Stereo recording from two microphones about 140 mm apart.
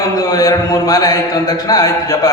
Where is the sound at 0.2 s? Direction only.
25° left (ahead or behind).